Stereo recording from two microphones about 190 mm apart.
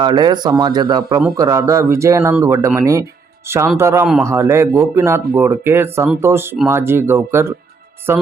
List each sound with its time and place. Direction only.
0.0 s speech: 25° right (ahead or behind)
4.0 s a man's voice: centre (ahead or behind)
4.3 s speech: 15° right (ahead or behind)